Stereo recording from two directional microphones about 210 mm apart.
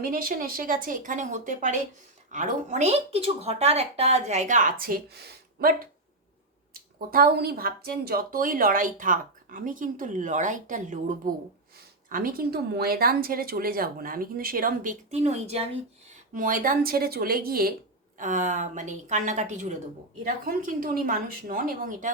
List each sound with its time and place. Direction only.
0.0 s speech: 40° right (ahead or behind)